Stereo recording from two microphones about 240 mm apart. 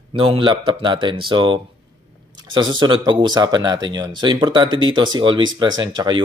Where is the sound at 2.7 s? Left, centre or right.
Centre.